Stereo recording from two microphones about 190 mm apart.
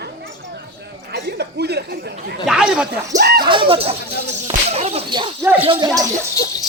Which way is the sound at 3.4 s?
25° right (ahead or behind).